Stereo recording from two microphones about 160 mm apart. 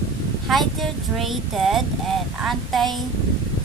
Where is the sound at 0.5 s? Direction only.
Centre (ahead or behind).